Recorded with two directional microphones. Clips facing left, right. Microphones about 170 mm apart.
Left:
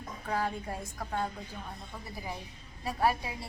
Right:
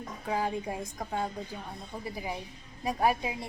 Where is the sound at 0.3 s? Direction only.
15° right (ahead or behind).